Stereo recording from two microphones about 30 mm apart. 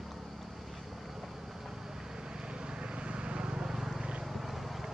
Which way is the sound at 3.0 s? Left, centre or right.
Right.